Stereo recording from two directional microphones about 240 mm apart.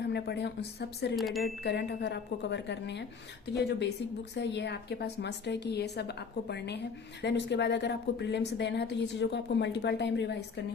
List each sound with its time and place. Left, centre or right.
0.0 s speech: left
1.1 s speech: centre
1.6 s speech: left